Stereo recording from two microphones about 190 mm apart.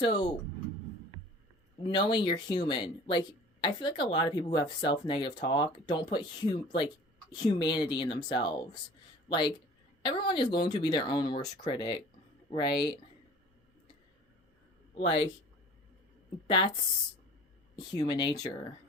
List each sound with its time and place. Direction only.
1.8 s speech: 25° left (ahead or behind)
14.9 s speech: 30° left (ahead or behind)
16.5 s speech: 25° left (ahead or behind)
17.7 s speech: 20° left (ahead or behind)